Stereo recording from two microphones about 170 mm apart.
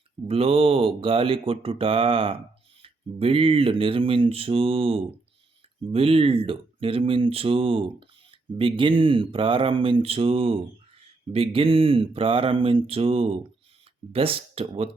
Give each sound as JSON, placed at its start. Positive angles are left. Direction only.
{"t": 0.3, "sound": "speech", "side_deg": -35}